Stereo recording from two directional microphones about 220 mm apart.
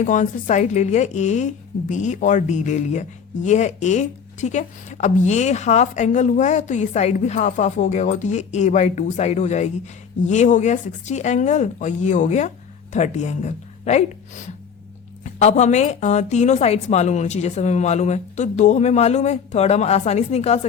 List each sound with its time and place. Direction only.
0.0 s speech: 35° left (ahead or behind)